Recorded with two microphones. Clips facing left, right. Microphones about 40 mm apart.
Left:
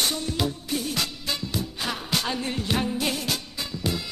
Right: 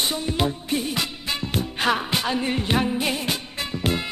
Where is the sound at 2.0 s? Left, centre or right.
Right.